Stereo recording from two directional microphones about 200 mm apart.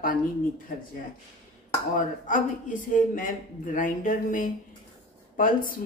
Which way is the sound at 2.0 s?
40° left (ahead or behind).